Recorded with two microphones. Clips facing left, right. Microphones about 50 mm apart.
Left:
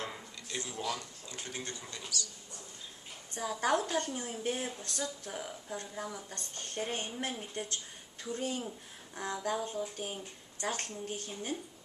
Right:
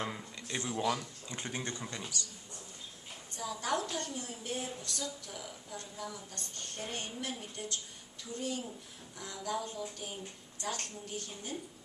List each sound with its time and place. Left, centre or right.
0.1 s a sound: centre
1.3 s speech: right
3.3 s a woman's voice: left